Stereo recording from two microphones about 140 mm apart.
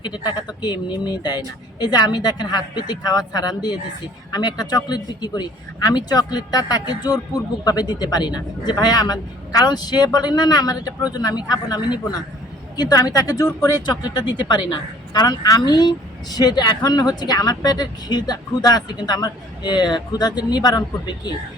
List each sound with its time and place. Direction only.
0.0 s speech: 30° left (ahead or behind)